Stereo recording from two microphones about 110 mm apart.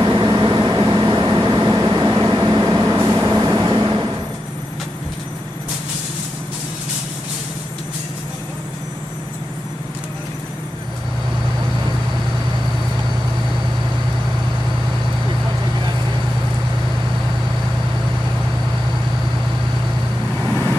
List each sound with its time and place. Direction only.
0.0 s vehicle: 40° right (ahead or behind)
20.4 s vehicle: 20° left (ahead or behind)